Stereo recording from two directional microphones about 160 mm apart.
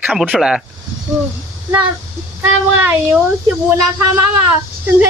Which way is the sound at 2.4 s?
15° right (ahead or behind).